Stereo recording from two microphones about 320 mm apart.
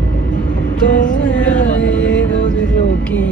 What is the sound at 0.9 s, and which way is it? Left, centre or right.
Music, left.